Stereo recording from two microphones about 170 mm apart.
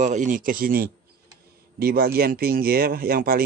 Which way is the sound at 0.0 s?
45° right (ahead or behind).